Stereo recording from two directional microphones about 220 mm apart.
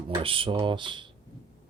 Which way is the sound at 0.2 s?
25° right (ahead or behind).